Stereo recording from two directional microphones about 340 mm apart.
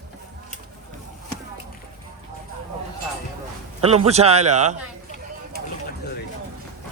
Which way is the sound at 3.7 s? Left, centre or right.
Centre.